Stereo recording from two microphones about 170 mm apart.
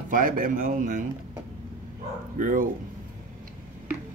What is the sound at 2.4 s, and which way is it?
Speech, 55° right (ahead or behind).